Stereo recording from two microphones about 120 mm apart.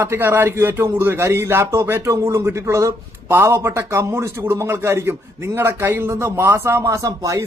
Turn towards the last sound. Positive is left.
turn(degrees=-25)  # may be behind; listen again after turning